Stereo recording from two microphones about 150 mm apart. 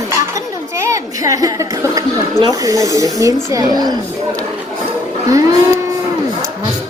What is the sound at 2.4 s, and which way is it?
Speech, 20° right (ahead or behind).